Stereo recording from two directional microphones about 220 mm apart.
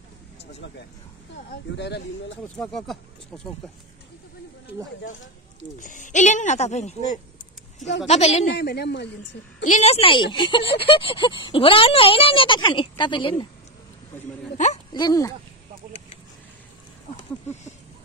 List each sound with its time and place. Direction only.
0.5 s speech: 50° left (ahead or behind)
2.6 s speech: centre (ahead or behind)
5.8 s speech: 35° left (ahead or behind)
8.1 s speech: 30° left (ahead or behind)
8.5 s speech: 50° left (ahead or behind)
9.7 s speech: 30° left (ahead or behind)
14.9 s speech: 20° left (ahead or behind)